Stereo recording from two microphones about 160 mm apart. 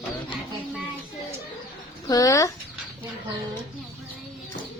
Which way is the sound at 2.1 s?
20° left (ahead or behind).